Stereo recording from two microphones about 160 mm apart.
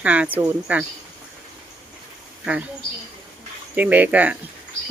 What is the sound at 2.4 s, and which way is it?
Speech, 5° right (ahead or behind).